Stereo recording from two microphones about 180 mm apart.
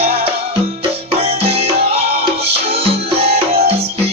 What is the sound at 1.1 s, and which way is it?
Music, 35° right (ahead or behind).